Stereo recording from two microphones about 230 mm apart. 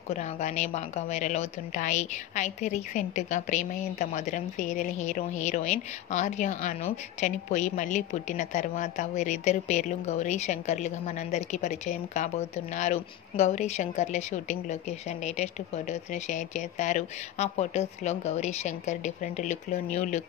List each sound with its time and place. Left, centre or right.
0.1 s a woman's voice: left